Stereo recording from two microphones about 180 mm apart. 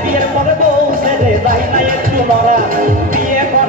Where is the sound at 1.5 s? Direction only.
50° right (ahead or behind).